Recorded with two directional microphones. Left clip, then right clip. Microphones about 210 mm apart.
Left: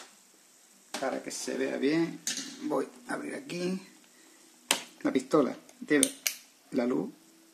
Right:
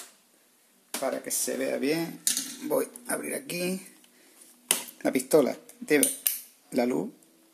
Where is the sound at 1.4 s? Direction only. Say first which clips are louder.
Right 1 dB; 25° right (ahead or behind).